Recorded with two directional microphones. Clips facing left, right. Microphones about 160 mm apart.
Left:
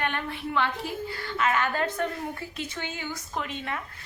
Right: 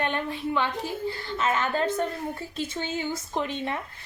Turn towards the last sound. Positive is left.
turn(degrees=-25)  # may be behind; listen again after turning